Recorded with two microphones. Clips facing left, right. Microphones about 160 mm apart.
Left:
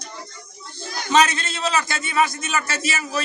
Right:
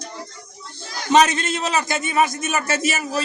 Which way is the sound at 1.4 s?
20° right (ahead or behind).